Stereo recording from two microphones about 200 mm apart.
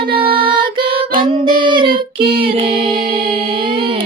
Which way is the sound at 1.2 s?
25° right (ahead or behind).